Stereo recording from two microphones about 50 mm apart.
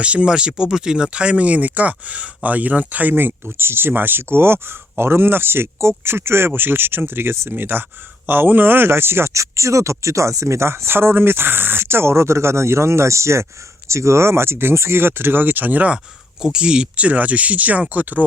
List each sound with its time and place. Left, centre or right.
0.0 s speech: right
9.3 s speech: right
16.4 s speech: centre; by 18.3 s right